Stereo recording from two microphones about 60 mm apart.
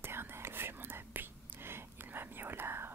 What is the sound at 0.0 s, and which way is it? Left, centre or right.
Whispering, right.